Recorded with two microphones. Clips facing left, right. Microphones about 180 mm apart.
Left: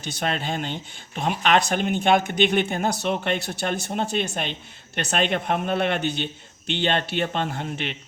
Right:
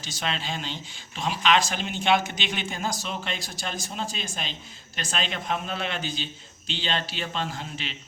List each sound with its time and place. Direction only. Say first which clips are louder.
0.0 s speech: left 5 dB; 60° left (ahead or behind)